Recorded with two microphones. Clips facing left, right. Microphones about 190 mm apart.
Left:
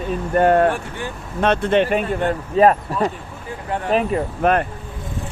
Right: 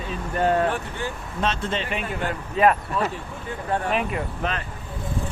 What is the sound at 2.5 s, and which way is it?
Speech, 35° left (ahead or behind).